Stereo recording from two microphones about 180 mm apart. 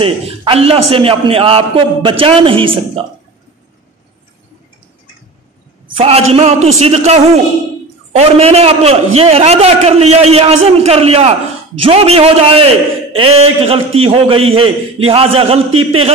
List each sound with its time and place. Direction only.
0.0 s a man's voice: 30° right (ahead or behind)
5.9 s a man's voice: 35° right (ahead or behind)